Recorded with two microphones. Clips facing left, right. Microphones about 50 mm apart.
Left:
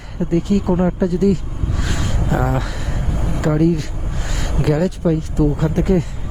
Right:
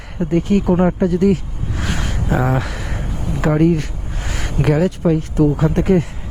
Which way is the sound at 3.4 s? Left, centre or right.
Right.